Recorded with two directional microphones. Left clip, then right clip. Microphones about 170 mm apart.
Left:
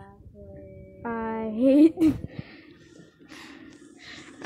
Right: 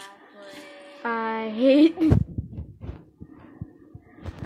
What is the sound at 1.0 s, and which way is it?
Speech, 10° left (ahead or behind).